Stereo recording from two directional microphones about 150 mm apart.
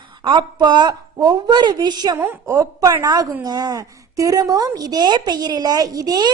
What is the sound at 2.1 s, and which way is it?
A woman's voice, 15° right (ahead or behind).